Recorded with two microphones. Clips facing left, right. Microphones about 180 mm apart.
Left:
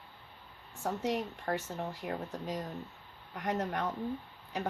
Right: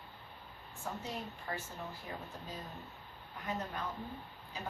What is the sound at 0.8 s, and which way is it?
Speech, 75° left (ahead or behind).